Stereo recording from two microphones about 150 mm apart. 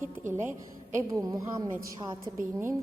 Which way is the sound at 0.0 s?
15° right (ahead or behind).